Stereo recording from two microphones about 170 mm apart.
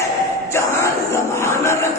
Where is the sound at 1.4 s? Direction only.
15° left (ahead or behind).